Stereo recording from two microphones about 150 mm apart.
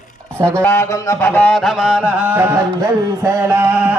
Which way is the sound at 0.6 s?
15° left (ahead or behind).